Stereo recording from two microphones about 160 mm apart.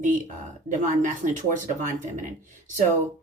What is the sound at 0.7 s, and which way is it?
Speech, 55° right (ahead or behind).